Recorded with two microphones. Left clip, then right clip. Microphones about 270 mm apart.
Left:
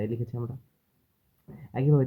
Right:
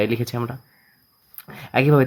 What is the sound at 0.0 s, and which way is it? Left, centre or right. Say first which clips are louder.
Speech: right 12 dB; right.